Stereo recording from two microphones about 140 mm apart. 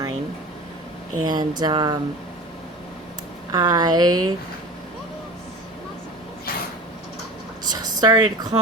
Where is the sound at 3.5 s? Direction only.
30° right (ahead or behind).